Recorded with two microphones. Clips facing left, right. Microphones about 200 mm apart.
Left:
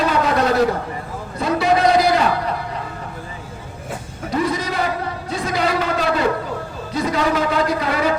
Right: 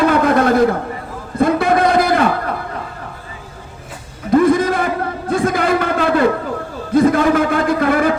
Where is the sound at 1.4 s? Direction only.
55° right (ahead or behind).